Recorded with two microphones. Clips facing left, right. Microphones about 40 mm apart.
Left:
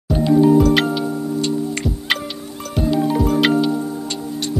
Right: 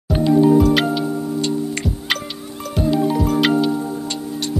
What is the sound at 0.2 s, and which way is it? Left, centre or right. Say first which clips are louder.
Music: even; centre.